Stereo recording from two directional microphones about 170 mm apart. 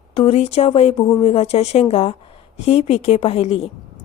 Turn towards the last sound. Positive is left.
turn(degrees=35)  # may be behind; listen again after turning